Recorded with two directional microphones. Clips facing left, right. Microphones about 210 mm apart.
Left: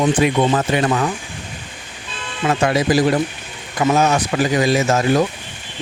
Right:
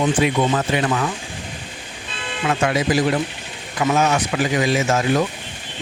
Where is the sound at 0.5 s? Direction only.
40° left (ahead or behind).